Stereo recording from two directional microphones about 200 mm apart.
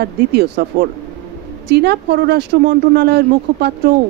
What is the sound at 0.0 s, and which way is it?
Speech, 55° right (ahead or behind).